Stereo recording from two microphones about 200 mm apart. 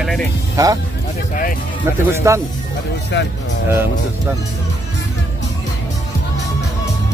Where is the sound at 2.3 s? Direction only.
15° right (ahead or behind).